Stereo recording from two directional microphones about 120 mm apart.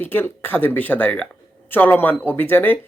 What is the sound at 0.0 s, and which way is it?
Speech, 15° left (ahead or behind).